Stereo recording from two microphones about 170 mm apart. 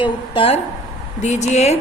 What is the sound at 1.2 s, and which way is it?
Speech, 45° left (ahead or behind).